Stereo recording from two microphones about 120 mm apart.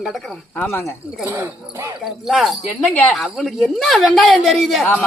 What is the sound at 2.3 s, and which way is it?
Speech, centre (ahead or behind).